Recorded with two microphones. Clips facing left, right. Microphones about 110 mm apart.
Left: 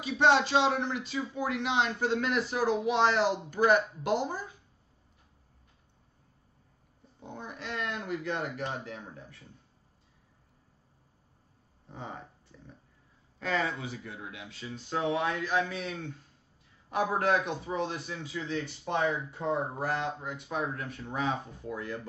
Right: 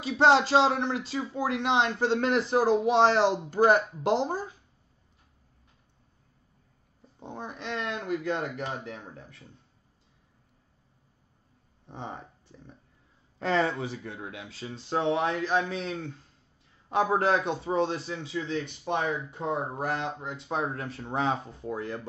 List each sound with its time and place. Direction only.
0.3 s speech: 35° right (ahead or behind)
7.2 s speech: 30° right (ahead or behind)
11.9 s speech: 25° right (ahead or behind)
18.7 s speech: 20° right (ahead or behind)